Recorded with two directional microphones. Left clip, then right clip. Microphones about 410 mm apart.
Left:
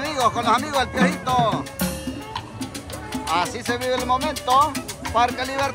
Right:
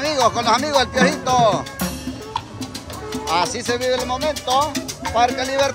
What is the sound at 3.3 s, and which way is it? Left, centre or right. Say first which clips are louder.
Speech: right 3 dB; centre.